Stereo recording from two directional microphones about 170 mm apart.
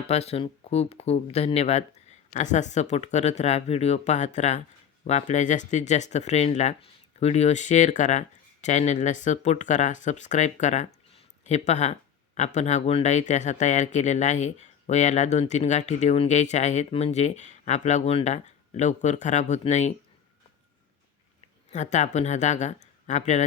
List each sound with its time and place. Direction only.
0.1 s speech: 35° left (ahead or behind)
21.7 s speech: 45° left (ahead or behind)